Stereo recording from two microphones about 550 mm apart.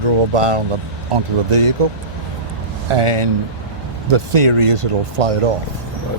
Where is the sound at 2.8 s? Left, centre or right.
Right.